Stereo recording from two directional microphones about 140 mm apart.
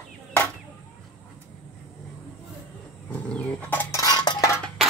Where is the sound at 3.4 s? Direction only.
10° left (ahead or behind).